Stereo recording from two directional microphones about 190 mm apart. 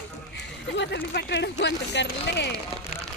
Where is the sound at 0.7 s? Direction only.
65° left (ahead or behind).